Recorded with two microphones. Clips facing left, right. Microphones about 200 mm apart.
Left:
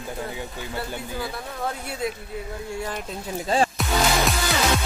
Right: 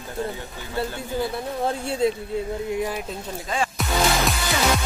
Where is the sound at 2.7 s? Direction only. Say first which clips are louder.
Right 3 dB; 15° right (ahead or behind).